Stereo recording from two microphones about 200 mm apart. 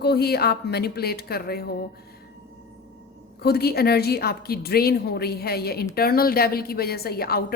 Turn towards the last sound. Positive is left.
turn(degrees=50)  # may be behind; listen again after turning